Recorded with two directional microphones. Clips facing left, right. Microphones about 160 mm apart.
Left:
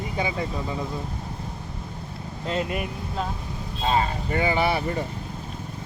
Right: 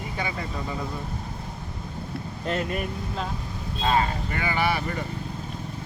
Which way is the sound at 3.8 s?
25° left (ahead or behind).